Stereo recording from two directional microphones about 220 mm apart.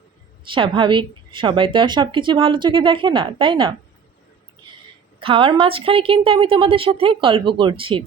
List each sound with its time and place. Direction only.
0.4 s a woman's voice: 25° right (ahead or behind)
5.2 s a woman's voice: 25° right (ahead or behind)